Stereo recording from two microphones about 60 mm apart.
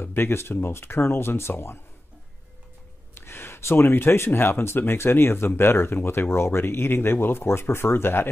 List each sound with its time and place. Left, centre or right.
0.0 s speech: left
3.2 s speech: left